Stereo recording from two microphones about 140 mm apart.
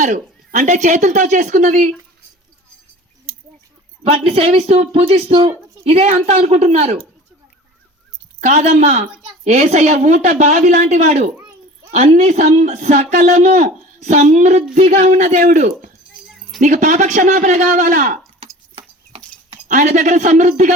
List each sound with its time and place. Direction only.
0.0 s a man's voice: 65° right (ahead or behind)
4.0 s speech: 45° right (ahead or behind)
8.4 s a man's voice: 55° right (ahead or behind)
19.6 s a man's voice: 60° right (ahead or behind)